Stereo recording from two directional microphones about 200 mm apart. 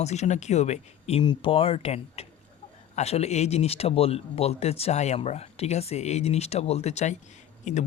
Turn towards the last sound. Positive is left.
turn(degrees=35)  # may be behind; listen again after turning